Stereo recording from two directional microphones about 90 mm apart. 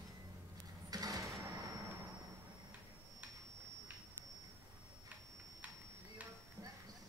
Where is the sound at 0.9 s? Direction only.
40° right (ahead or behind).